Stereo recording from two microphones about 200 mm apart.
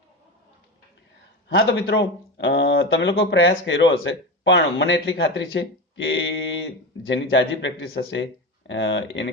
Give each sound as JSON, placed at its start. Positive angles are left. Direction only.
{"t": 1.5, "sound": "speech", "side_deg": 60}